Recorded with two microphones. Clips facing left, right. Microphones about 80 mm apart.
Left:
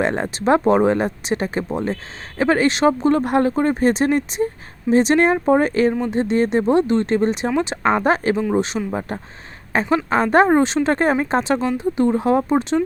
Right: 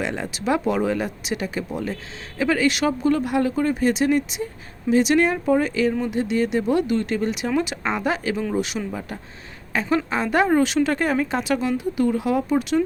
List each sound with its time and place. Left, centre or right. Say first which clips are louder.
0.0 s speech: left 6 dB; left